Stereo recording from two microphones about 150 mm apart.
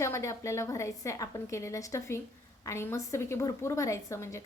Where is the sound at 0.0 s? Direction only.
20° left (ahead or behind).